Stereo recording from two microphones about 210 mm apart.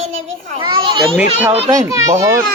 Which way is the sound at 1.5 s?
25° right (ahead or behind).